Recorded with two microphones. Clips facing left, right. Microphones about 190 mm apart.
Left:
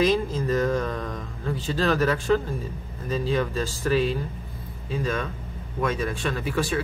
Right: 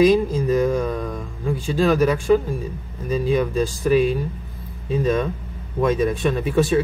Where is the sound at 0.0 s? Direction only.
15° right (ahead or behind).